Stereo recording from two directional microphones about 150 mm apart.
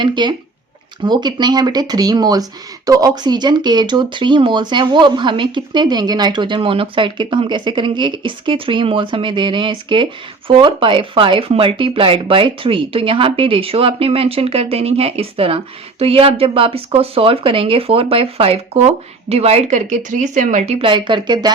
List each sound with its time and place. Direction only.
0.0 s speech: 30° right (ahead or behind)